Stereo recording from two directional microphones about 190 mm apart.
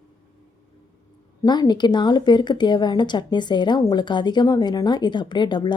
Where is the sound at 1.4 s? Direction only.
20° left (ahead or behind).